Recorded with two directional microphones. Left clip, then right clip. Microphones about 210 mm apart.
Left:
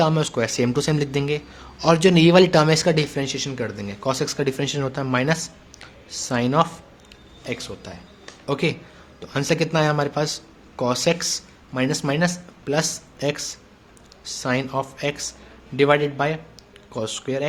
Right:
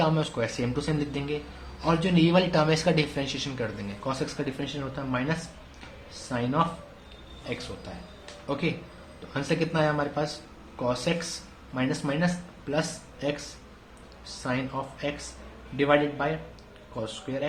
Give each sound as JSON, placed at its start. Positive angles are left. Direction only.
{"t": 0.0, "sound": "speech", "side_deg": 45}
{"t": 14.4, "sound": "speech", "side_deg": 50}